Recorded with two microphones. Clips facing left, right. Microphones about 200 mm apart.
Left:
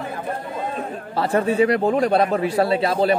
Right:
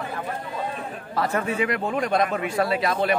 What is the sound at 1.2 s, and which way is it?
A man's voice, 30° left (ahead or behind).